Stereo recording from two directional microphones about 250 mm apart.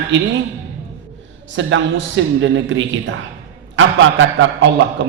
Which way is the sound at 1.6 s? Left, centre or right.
Right.